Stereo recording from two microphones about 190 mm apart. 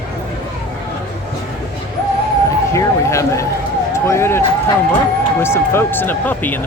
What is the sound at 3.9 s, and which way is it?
Vehicle, 15° left (ahead or behind).